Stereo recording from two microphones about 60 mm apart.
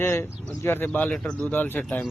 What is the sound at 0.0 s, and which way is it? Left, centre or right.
Speech, left.